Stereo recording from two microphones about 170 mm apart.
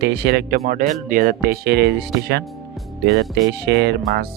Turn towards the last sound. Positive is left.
turn(degrees=-70)  # may be behind; listen again after turning